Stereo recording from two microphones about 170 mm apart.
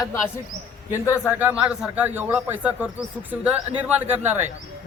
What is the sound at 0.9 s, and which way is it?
Speech, 10° right (ahead or behind).